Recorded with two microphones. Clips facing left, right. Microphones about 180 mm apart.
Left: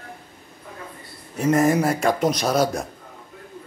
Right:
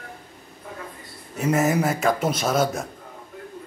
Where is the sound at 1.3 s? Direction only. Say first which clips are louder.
Left 3 dB; centre (ahead or behind).